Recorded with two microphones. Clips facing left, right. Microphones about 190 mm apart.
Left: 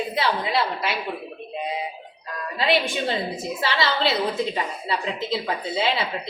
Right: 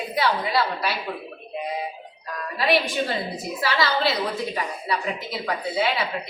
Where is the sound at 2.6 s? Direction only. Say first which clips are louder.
Even; 25° left (ahead or behind).